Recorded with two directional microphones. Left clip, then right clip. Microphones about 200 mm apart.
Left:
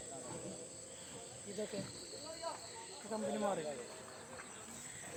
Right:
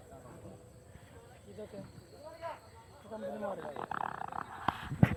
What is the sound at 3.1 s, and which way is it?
Snake, 25° left (ahead or behind).